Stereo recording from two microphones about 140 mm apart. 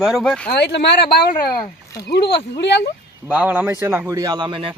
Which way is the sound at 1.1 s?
90° left.